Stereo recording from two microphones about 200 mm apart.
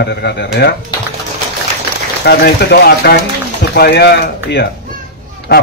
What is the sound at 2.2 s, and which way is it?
A man's voice, 55° left (ahead or behind).